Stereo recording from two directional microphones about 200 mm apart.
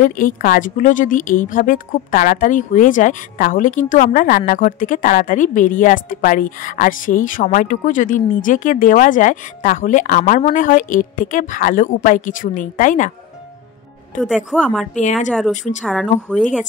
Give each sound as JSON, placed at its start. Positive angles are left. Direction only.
{"t": 0.0, "sound": "a woman's voice", "side_deg": 40}
{"t": 14.2, "sound": "a woman's voice", "side_deg": 0}
{"t": 15.5, "sound": "a woman's voice", "side_deg": 40}
{"t": 15.8, "sound": "a woman's voice", "side_deg": 0}